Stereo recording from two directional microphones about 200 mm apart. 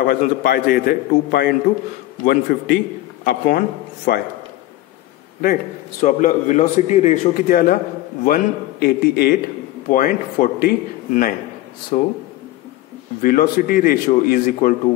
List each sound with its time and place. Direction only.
0.1 s a man's voice: 50° left (ahead or behind)
5.4 s a man's voice: 40° left (ahead or behind)
13.2 s a man's voice: 45° left (ahead or behind)